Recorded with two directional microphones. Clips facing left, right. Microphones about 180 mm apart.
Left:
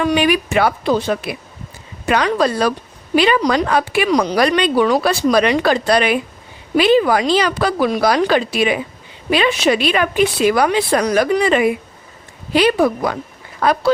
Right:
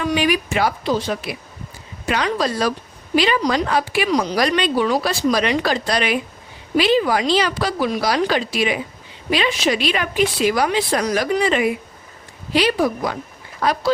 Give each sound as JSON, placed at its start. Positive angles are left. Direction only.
{"t": 0.1, "sound": "a woman's voice", "side_deg": 60}